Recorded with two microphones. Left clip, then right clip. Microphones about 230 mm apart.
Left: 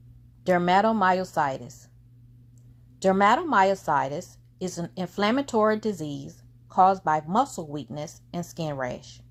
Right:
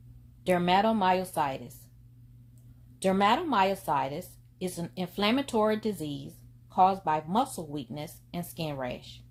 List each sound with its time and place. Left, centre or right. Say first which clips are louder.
0.4 s a woman's voice: left 4 dB; left
3.0 s a woman's voice: left 5 dB; left